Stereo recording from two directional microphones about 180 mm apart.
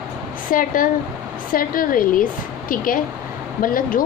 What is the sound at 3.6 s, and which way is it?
Speech, 50° left (ahead or behind).